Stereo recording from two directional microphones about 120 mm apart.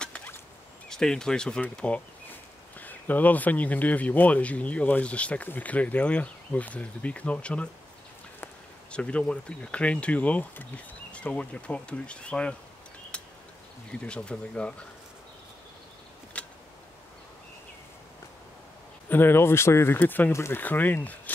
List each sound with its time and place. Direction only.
0.0 s turkey: 10° left (ahead or behind)
0.8 s speech: 5° left (ahead or behind)
8.9 s speech: 10° left (ahead or behind)
13.1 s a sound: 10° left (ahead or behind)
13.9 s speech: 10° left (ahead or behind)
16.3 s a sound: 10° left (ahead or behind)
19.0 s speech: 15° left (ahead or behind)